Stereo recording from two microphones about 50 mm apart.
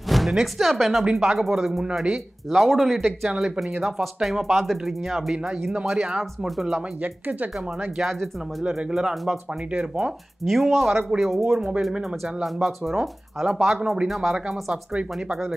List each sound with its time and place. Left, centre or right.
0.1 s speech: centre
1.1 s speech: centre
7.0 s speech: right
8.6 s speech: centre
9.8 s speech: centre
10.4 s speech: centre